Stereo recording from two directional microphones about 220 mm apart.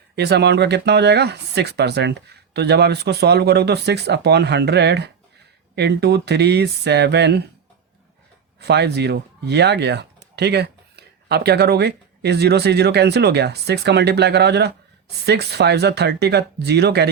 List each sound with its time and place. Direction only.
0.2 s speech: 50° right (ahead or behind)
8.5 s speech: 50° right (ahead or behind)